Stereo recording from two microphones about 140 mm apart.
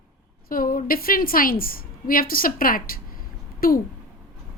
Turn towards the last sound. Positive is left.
turn(degrees=90)